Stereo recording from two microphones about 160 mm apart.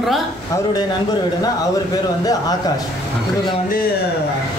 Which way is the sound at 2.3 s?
25° left (ahead or behind).